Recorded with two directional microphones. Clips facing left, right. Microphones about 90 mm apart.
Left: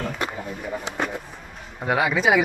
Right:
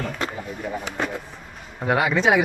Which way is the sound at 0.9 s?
15° left (ahead or behind).